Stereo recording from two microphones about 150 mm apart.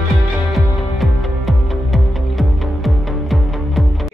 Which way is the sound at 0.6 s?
Centre (ahead or behind).